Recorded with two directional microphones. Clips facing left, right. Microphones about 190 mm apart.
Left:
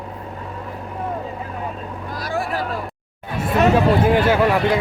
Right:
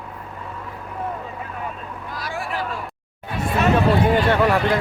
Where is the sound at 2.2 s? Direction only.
40° left (ahead or behind).